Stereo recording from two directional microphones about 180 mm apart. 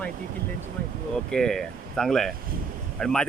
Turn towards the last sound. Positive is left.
turn(degrees=5)  # may be behind; listen again after turning